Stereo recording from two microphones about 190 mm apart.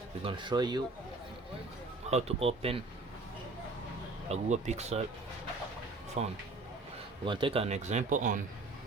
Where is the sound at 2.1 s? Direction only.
35° right (ahead or behind).